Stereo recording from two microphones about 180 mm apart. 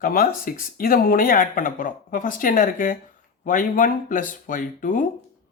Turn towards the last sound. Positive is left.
turn(degrees=45)  # may be behind; listen again after turning